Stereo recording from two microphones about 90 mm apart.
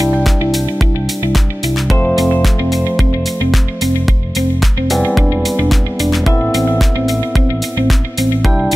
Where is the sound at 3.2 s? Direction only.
Centre (ahead or behind).